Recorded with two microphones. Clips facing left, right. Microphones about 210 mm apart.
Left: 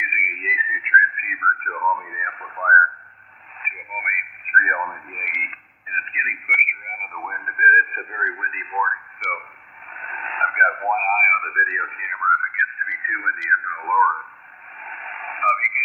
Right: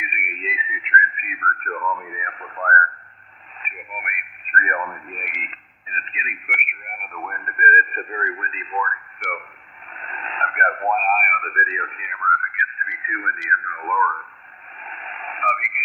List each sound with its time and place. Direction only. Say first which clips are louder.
0.0 s whistling: right 3 dB; 30° right (ahead or behind)
3.6 s radio: right 1 dB; 30° right (ahead or behind)